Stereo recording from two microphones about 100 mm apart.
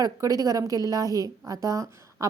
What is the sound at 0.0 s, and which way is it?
A woman's voice, 35° right (ahead or behind).